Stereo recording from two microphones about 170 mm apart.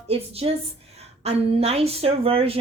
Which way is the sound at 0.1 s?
35° right (ahead or behind).